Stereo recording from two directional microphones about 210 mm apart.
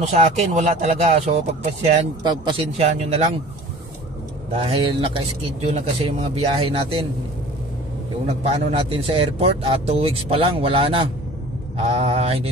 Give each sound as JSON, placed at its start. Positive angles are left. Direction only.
{"t": 0.0, "sound": "speech", "side_deg": -30}
{"t": 4.6, "sound": "speech", "side_deg": -25}
{"t": 8.7, "sound": "speech", "side_deg": -25}